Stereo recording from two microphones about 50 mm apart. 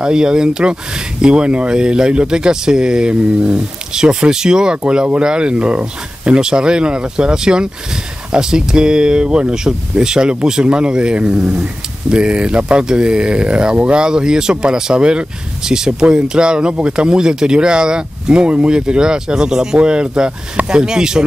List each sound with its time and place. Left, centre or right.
0.0 s speech: centre